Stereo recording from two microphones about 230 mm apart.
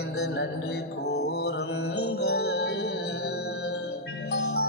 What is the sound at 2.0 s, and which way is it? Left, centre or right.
Music, left.